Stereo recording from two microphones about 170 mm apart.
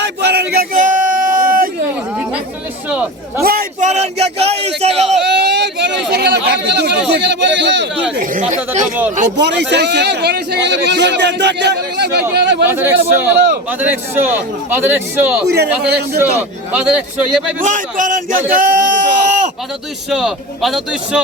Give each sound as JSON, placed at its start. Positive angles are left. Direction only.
{"t": 0.0, "sound": "a sound", "side_deg": -75}
{"t": 2.9, "sound": "a man's voice", "side_deg": -10}
{"t": 3.4, "sound": "a man's voice", "side_deg": -60}
{"t": 5.3, "sound": "a sound", "side_deg": -85}
{"t": 7.1, "sound": "a man's voice", "side_deg": -85}
{"t": 8.2, "sound": "a man's voice", "side_deg": -50}
{"t": 9.4, "sound": "speech", "side_deg": -85}
{"t": 12.6, "sound": "a man's voice", "side_deg": -10}
{"t": 15.4, "sound": "a man's voice", "side_deg": -75}
{"t": 16.7, "sound": "a man's voice", "side_deg": -5}
{"t": 17.6, "sound": "a man's voice", "side_deg": -50}
{"t": 18.5, "sound": "a sound", "side_deg": -55}
{"t": 20.1, "sound": "a man's voice", "side_deg": -5}